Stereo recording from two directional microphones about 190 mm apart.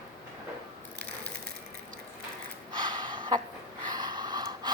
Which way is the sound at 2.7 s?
25° right (ahead or behind).